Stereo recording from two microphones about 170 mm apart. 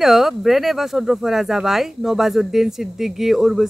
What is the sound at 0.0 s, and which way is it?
Speech, centre (ahead or behind).